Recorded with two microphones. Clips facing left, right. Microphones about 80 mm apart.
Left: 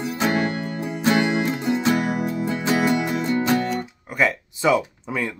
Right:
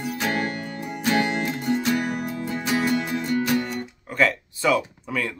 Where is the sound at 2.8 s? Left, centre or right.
Left.